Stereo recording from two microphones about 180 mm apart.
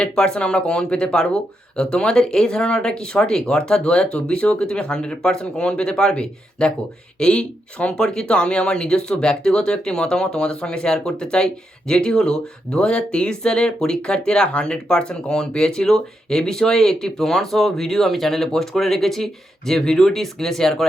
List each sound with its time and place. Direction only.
0.0 s speech: 5° left (ahead or behind)